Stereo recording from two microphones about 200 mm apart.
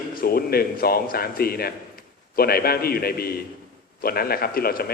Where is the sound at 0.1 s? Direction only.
45° left (ahead or behind).